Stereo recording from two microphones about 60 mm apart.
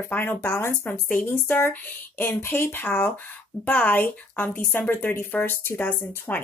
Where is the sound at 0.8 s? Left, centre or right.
Left.